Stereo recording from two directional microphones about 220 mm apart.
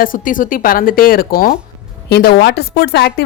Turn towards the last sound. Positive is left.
turn(degrees=50)  # may be behind; listen again after turning